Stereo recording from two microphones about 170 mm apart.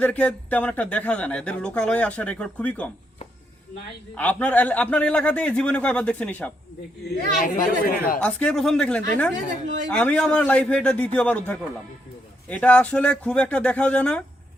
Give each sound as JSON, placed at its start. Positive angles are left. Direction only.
{"t": 0.0, "sound": "speech", "side_deg": 10}
{"t": 4.1, "sound": "speech", "side_deg": 10}
{"t": 7.0, "sound": "speech", "side_deg": 60}
{"t": 8.2, "sound": "speech", "side_deg": 5}